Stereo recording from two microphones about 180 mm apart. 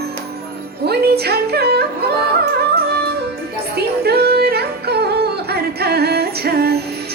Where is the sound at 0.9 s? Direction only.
60° right (ahead or behind).